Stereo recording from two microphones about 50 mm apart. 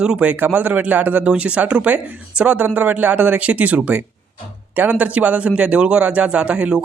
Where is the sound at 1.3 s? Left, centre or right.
Right.